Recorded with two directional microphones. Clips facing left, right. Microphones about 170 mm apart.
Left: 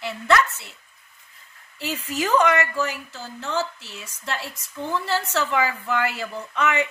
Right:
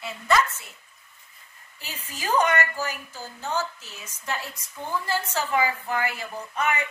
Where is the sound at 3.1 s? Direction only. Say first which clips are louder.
Left 2 dB; 75° left (ahead or behind).